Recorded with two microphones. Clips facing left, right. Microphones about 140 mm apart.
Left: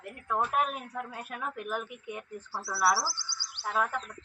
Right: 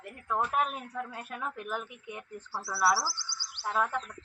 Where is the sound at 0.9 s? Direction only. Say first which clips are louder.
Even; 15° left (ahead or behind).